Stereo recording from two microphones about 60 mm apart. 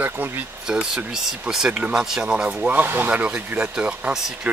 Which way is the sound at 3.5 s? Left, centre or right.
Centre.